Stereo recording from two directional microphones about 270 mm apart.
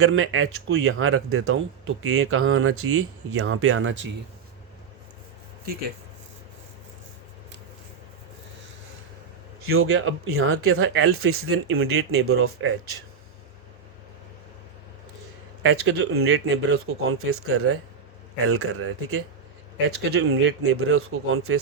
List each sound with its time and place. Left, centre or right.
0.0 s speech: right
9.6 s speech: right
15.6 s speech: right